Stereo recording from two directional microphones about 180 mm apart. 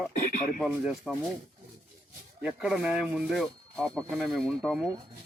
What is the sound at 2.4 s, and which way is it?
Speech, 5° right (ahead or behind).